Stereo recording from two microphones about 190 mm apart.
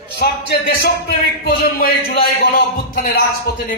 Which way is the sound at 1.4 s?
50° left (ahead or behind).